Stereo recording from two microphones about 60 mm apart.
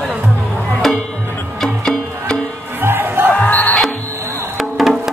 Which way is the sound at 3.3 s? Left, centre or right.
Left.